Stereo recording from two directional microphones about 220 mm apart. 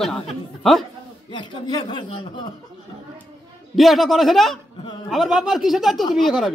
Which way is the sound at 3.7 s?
Centre (ahead or behind).